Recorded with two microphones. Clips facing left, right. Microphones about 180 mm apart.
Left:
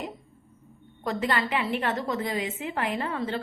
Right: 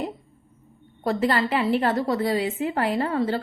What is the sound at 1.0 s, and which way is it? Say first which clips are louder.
A woman's voice: right 5 dB; 35° right (ahead or behind).